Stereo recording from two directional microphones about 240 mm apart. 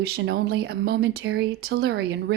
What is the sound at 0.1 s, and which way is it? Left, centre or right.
Speech, right.